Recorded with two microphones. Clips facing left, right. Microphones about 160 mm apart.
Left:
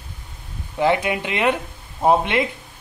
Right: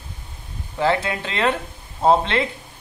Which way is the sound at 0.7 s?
15° left (ahead or behind).